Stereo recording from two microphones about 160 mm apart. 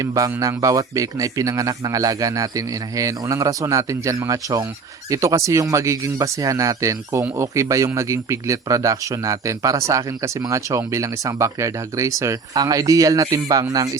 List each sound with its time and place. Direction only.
0.0 s speech: 20° right (ahead or behind)